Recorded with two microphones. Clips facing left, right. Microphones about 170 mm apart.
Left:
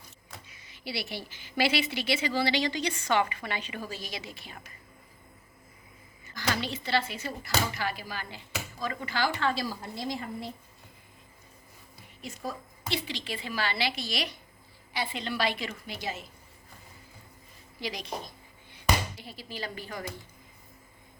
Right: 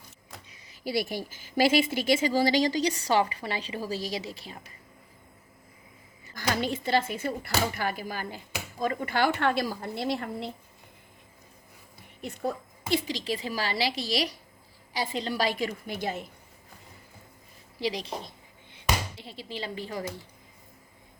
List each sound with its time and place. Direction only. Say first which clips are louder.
0.4 s a woman's voice: right 6 dB; 35° right (ahead or behind)
6.3 s a woman's voice: right 3 dB; 45° right (ahead or behind); by 10.5 s 65° right (ahead or behind)
12.2 s a woman's voice: right 6 dB; 60° right (ahead or behind)
12.9 s a woman's voice: right 6 dB; 40° right (ahead or behind)
17.7 s speech: right 5 dB; 30° right (ahead or behind)